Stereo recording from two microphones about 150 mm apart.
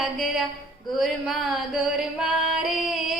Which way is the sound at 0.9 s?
Centre (ahead or behind).